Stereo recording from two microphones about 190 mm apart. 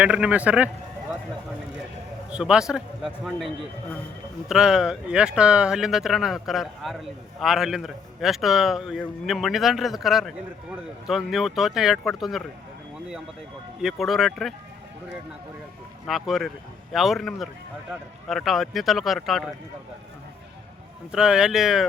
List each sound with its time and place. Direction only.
0.0 s speech: 5° right (ahead or behind)
2.3 s a man's voice: 5° right (ahead or behind)
13.8 s a man's voice: centre (ahead or behind)
16.0 s a man's voice: centre (ahead or behind)
21.1 s a man's voice: 5° right (ahead or behind)